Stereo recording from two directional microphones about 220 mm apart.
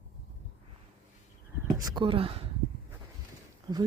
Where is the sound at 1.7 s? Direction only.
20° right (ahead or behind).